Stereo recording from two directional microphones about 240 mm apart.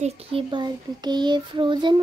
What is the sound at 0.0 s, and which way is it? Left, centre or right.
Child singing, right.